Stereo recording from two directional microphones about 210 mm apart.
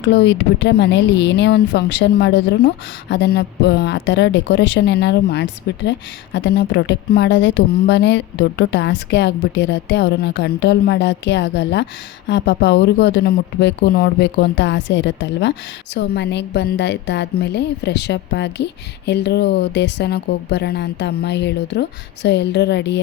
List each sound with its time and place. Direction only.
0.0 s speech: 55° left (ahead or behind)